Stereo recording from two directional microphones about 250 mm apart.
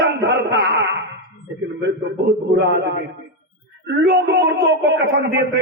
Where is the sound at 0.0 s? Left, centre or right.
Right.